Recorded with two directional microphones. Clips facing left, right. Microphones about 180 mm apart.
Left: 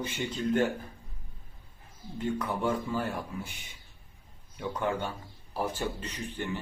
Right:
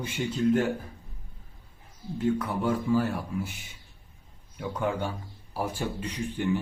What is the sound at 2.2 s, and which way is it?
Speech, 5° right (ahead or behind).